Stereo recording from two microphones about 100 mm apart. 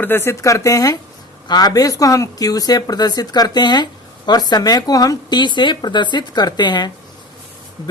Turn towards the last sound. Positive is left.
turn(degrees=50)  # may be behind; listen again after turning